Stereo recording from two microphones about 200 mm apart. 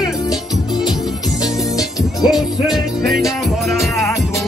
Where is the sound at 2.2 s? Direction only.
Centre (ahead or behind).